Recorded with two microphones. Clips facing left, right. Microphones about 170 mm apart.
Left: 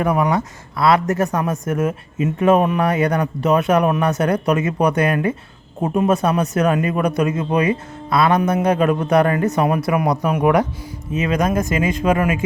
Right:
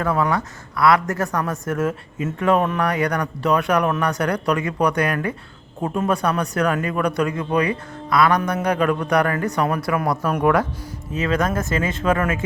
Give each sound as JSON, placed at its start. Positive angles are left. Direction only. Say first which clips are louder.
{"t": 0.0, "sound": "speech", "louder": "left 3 dB", "side_deg": 20}